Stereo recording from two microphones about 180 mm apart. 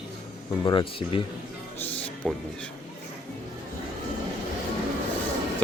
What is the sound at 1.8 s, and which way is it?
Speech, 10° left (ahead or behind).